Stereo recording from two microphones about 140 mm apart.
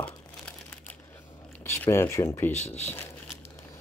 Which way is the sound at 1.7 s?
20° left (ahead or behind).